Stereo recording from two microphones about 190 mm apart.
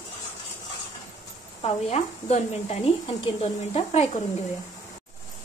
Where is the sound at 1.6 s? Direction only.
35° left (ahead or behind).